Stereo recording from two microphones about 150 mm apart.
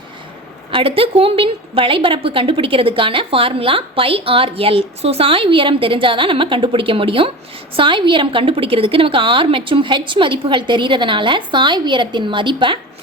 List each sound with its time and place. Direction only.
0.7 s a woman's voice: 35° right (ahead or behind)